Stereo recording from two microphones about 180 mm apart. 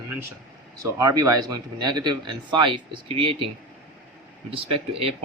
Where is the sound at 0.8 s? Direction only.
20° right (ahead or behind).